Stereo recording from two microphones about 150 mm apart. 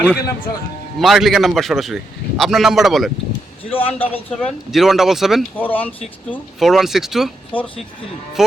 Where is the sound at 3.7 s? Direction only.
40° left (ahead or behind).